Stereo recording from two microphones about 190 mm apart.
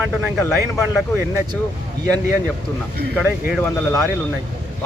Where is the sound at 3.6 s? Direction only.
15° left (ahead or behind).